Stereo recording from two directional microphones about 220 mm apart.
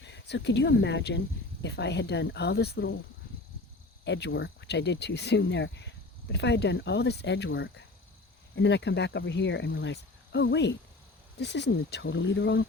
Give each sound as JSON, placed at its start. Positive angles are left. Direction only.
{"t": 0.0, "sound": "speech", "side_deg": 50}
{"t": 4.0, "sound": "speech", "side_deg": 55}